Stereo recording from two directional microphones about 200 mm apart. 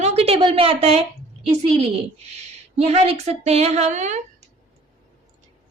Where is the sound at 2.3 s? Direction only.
30° right (ahead or behind).